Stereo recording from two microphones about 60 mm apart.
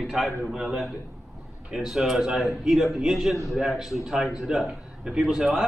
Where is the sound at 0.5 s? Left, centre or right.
Centre.